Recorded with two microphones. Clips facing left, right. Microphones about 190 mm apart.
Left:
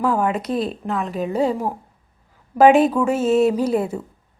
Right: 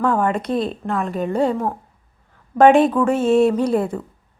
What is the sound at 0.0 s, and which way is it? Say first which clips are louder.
Speech: right 1 dB; 5° left (ahead or behind).